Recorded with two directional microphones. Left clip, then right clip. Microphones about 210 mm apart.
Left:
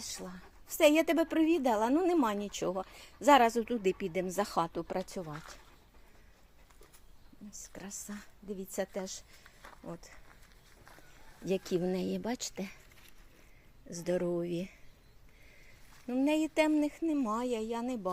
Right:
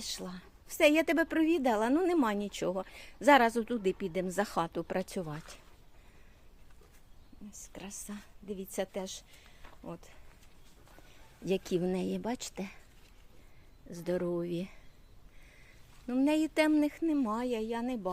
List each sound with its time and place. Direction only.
0.0 s a woman's voice: 20° right (ahead or behind)
7.6 s a woman's voice: 5° right (ahead or behind)
11.4 s a woman's voice: 10° right (ahead or behind)
13.9 s a woman's voice: 5° right (ahead or behind)
16.0 s a woman's voice: 10° right (ahead or behind)